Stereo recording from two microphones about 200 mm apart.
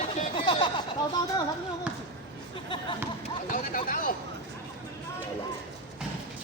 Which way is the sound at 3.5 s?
40° left (ahead or behind).